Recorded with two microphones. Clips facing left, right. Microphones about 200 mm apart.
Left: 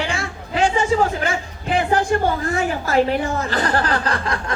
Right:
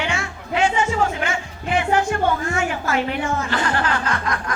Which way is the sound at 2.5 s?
35° left (ahead or behind).